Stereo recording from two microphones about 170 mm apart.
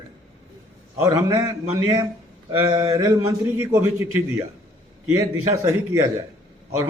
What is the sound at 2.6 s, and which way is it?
A man's voice, 25° right (ahead or behind).